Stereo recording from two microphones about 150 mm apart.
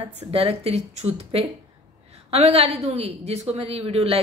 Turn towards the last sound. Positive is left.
turn(degrees=-40)  # may be behind; listen again after turning